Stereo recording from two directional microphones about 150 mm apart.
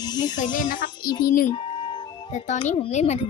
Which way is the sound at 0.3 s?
60° left (ahead or behind).